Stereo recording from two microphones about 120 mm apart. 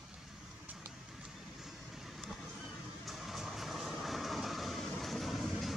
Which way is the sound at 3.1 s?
Centre (ahead or behind).